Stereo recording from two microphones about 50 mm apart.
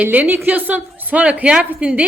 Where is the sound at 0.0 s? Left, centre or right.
Right.